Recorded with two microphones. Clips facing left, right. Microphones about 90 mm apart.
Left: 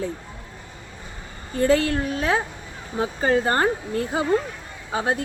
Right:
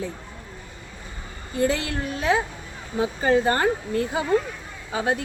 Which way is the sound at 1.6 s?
40° left (ahead or behind).